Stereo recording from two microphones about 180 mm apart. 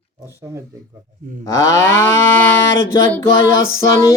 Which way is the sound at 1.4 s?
15° left (ahead or behind).